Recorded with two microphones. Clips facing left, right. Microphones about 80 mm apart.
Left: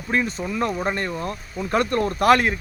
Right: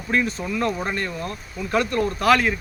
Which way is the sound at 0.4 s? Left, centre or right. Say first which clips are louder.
Left 1 dB; left.